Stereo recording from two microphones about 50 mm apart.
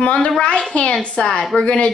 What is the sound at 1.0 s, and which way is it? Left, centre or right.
Speech, left.